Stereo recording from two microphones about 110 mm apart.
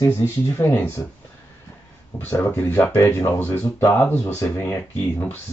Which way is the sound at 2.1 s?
20° left (ahead or behind).